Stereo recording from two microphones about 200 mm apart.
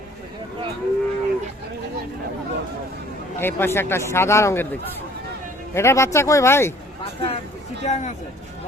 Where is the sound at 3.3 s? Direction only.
10° left (ahead or behind).